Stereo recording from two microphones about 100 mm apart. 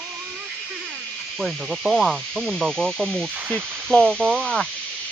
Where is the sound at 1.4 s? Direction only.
Centre (ahead or behind).